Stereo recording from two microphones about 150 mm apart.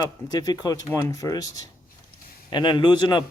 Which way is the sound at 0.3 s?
25° left (ahead or behind).